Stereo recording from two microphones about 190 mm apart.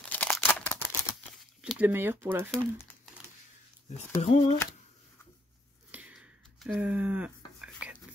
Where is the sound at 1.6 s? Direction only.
5° right (ahead or behind).